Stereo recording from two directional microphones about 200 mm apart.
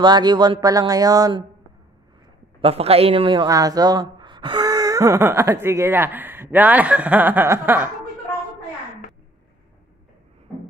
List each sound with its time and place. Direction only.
0.0 s speech: 20° right (ahead or behind)
2.6 s speech: 30° right (ahead or behind); by 7.9 s 10° right (ahead or behind)